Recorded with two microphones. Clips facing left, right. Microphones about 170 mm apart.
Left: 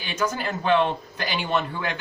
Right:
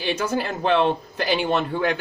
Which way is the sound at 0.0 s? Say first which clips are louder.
Right 3 dB; 30° right (ahead or behind).